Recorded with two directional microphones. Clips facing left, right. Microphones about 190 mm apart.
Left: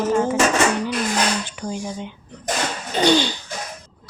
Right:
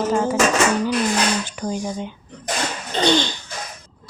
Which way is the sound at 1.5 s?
40° right (ahead or behind).